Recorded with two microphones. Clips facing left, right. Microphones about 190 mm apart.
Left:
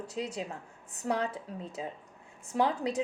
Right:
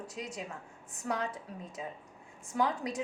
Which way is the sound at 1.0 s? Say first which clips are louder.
Left 3 dB; 30° left (ahead or behind).